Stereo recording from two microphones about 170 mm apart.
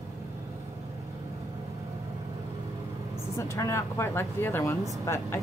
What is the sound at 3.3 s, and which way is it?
Speech, 15° left (ahead or behind).